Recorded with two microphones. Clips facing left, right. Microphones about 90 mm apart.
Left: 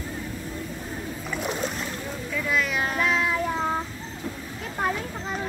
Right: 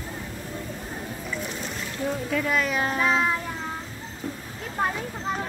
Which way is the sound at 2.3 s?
40° right (ahead or behind).